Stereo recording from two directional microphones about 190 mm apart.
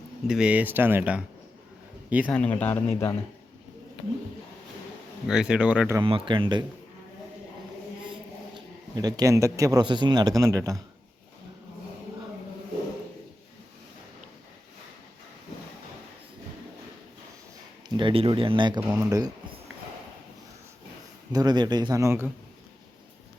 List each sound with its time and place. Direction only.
0.3 s speech: 5° right (ahead or behind)
2.2 s speech: 5° left (ahead or behind)
5.3 s speech: 5° right (ahead or behind)
6.0 s a man's voice: 25° right (ahead or behind)
8.5 s speech: 20° right (ahead or behind)
17.8 s speech: 25° right (ahead or behind)
18.8 s speech: 10° right (ahead or behind)
21.3 s a man's voice: 20° right (ahead or behind)